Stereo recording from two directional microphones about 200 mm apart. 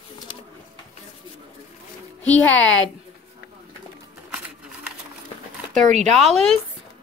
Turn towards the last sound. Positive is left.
turn(degrees=0)  # may be behind; listen again after turning